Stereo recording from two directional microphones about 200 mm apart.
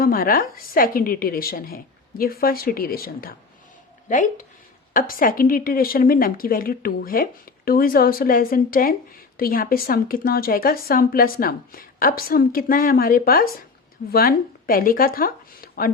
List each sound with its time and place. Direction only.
0.0 s speech: 45° left (ahead or behind)